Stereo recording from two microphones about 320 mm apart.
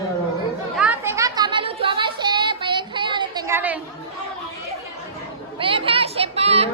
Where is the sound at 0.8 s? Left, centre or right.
Centre.